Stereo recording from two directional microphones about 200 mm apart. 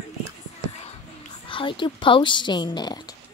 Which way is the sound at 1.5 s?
25° left (ahead or behind).